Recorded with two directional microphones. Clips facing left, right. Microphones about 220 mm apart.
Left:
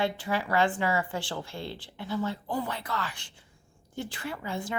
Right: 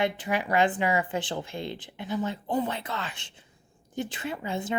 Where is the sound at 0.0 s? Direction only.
20° right (ahead or behind).